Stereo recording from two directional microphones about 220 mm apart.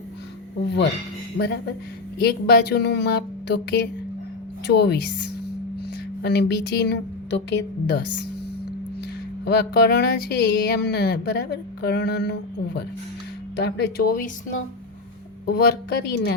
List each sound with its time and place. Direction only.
1.4 s speech: 50° left (ahead or behind)
9.4 s speech: 50° left (ahead or behind)
15.4 s speech: 45° left (ahead or behind)